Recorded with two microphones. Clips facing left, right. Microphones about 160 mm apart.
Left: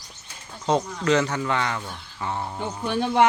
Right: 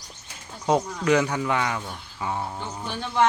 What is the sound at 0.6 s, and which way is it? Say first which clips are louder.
Speech: even; 10° right (ahead or behind).